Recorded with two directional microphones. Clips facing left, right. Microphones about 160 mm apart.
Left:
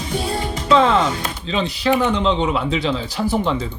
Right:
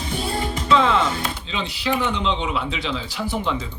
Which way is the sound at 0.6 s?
35° left (ahead or behind).